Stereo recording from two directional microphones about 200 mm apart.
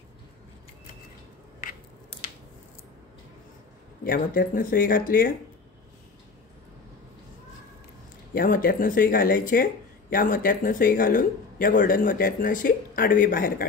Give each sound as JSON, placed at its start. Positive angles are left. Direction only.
{"t": 4.0, "sound": "speech", "side_deg": 45}
{"t": 8.4, "sound": "speech", "side_deg": 45}